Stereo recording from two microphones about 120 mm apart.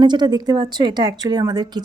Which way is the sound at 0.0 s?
40° right (ahead or behind).